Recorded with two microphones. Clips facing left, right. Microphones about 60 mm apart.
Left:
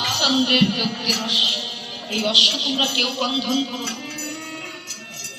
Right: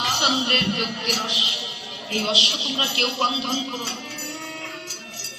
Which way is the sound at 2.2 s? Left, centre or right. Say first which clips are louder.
Left 2 dB; right.